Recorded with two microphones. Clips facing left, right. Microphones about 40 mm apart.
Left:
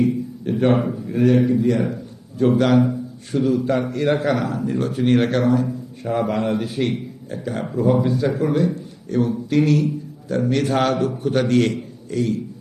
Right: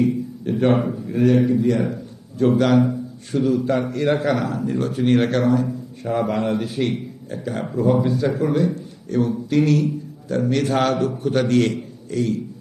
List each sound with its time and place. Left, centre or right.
0.0 s a man's voice: centre